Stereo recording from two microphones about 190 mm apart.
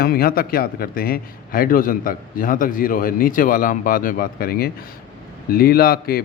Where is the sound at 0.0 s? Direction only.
50° left (ahead or behind).